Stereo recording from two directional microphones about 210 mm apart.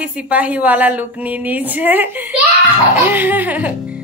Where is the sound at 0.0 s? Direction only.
5° right (ahead or behind).